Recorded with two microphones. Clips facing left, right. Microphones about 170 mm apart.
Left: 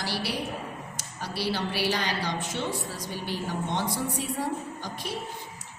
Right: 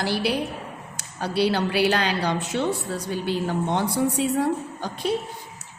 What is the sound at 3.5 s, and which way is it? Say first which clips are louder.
Speech: right 5 dB; 70° right (ahead or behind).